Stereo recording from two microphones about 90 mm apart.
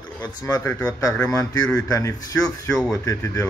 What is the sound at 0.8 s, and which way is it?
A man's voice, 40° left (ahead or behind).